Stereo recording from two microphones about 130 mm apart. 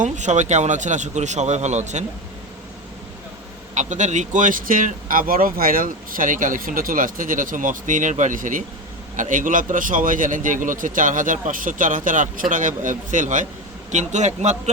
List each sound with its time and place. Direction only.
0.0 s speech: 65° right (ahead or behind)
3.8 s speech: 70° right (ahead or behind)
14.1 s speech: 65° right (ahead or behind)